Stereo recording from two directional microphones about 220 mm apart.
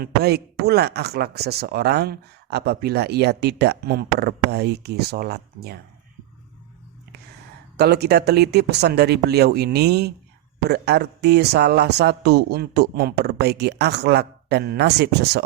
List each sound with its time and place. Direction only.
0.0 s speech: 45° right (ahead or behind)
7.8 s speech: 45° right (ahead or behind)